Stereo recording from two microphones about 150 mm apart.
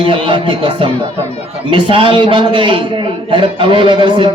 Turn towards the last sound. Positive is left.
turn(degrees=-30)  # may be behind; listen again after turning